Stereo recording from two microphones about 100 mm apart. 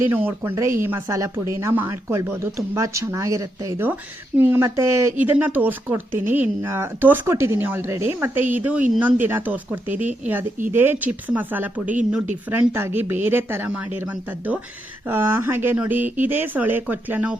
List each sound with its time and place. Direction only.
0.5 s speech: 30° right (ahead or behind)
5.1 s speech: 20° right (ahead or behind)